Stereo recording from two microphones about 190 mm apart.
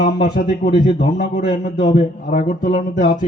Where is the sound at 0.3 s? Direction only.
50° left (ahead or behind).